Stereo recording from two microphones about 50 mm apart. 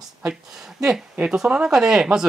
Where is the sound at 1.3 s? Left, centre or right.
Centre.